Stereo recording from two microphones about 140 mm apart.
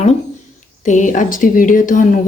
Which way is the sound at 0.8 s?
65° left (ahead or behind).